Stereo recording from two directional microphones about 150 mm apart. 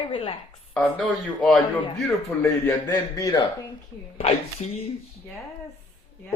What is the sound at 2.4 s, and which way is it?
A man's voice, 15° left (ahead or behind).